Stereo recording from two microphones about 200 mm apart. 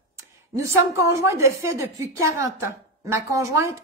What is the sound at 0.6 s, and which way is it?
A woman's voice, 15° right (ahead or behind).